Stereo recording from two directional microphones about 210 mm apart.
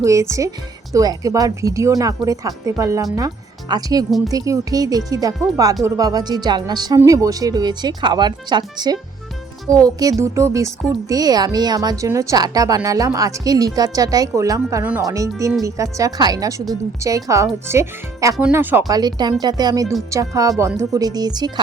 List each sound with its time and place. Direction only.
0.0 s a woman's voice: 15° right (ahead or behind)